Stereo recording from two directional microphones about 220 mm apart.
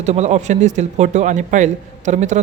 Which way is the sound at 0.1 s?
30° right (ahead or behind).